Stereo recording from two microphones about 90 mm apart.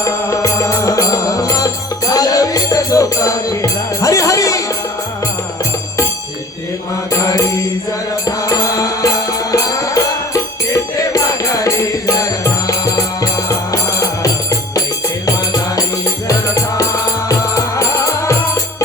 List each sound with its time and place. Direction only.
0.0 s music: 35° left (ahead or behind)
8.2 s music: 40° left (ahead or behind)
16.2 s music: 40° left (ahead or behind)